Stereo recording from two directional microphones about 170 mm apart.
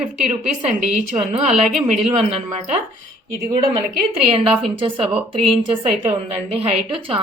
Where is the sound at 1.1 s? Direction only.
40° right (ahead or behind).